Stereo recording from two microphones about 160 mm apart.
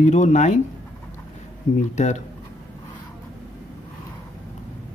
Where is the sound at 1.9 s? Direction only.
45° left (ahead or behind).